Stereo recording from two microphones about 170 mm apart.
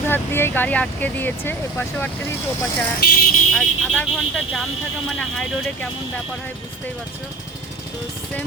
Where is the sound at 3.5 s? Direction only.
Centre (ahead or behind).